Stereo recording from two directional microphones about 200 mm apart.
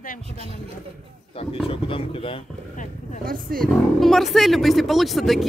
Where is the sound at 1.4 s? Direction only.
30° left (ahead or behind).